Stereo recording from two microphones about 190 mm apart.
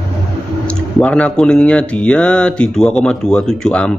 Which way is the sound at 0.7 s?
5° left (ahead or behind).